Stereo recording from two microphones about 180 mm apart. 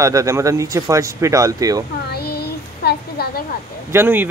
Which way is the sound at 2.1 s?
60° left (ahead or behind).